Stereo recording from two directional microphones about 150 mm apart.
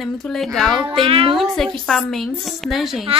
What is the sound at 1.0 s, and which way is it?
Child singing, 40° right (ahead or behind).